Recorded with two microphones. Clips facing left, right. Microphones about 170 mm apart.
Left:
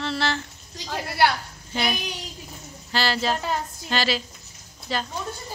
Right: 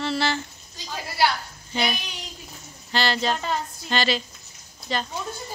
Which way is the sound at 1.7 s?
Centre (ahead or behind).